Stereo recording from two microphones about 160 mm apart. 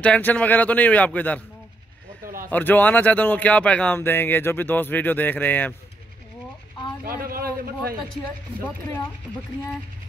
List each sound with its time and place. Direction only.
0.0 s speech: 10° left (ahead or behind)
2.2 s a sound: 60° right (ahead or behind)
2.5 s speech: 10° left (ahead or behind)
7.0 s a man's voice: 65° right (ahead or behind)